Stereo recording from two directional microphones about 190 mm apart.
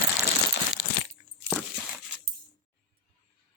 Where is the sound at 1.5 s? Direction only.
5° right (ahead or behind).